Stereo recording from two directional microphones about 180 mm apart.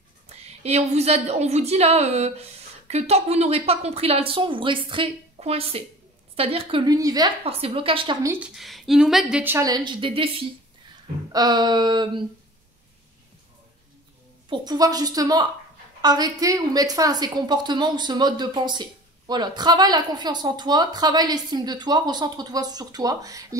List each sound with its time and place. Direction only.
0.3 s a woman's voice: 35° right (ahead or behind)
8.2 s a woman's voice: 10° right (ahead or behind)
8.5 s a woman's voice: centre (ahead or behind); by 10.3 s 30° right (ahead or behind)
11.3 s a woman's voice: 25° right (ahead or behind)
14.5 s a woman's voice: 20° right (ahead or behind)